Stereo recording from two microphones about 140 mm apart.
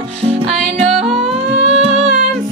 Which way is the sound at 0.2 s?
45° right (ahead or behind).